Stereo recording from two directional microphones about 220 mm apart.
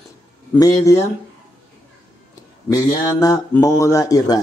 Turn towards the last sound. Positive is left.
turn(degrees=15)  # may be behind; listen again after turning